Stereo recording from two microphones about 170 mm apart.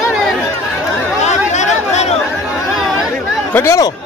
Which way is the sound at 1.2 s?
45° left (ahead or behind).